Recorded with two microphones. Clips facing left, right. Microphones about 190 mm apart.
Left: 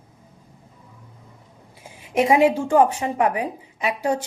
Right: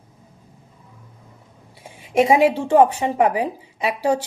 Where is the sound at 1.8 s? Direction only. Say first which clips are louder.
Right 3 dB; 25° right (ahead or behind).